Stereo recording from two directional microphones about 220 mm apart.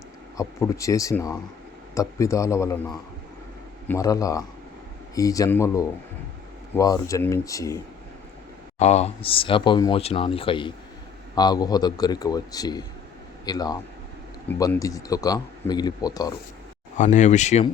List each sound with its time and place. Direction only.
0.3 s a man's voice: 15° left (ahead or behind)
8.8 s a man's voice: 30° left (ahead or behind)
17.0 s speech: 35° left (ahead or behind)